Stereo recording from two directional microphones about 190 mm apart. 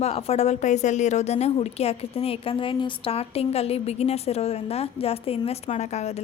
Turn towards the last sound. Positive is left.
turn(degrees=35)  # may be behind; listen again after turning